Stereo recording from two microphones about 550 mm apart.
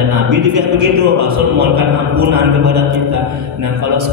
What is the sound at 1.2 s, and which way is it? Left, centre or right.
Mantra, right.